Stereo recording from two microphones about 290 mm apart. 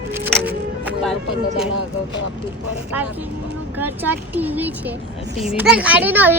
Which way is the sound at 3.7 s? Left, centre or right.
Centre.